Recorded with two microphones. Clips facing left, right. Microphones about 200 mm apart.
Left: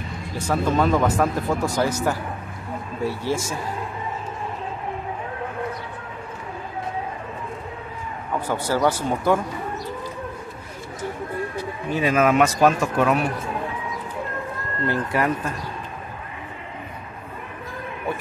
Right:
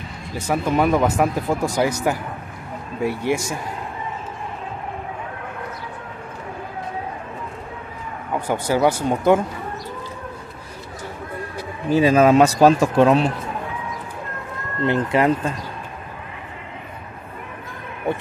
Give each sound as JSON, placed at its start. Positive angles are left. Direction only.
{"t": 0.5, "sound": "speech", "side_deg": -15}
{"t": 8.5, "sound": "speech", "side_deg": -15}
{"t": 11.9, "sound": "speech", "side_deg": -35}
{"t": 14.9, "sound": "speech", "side_deg": -20}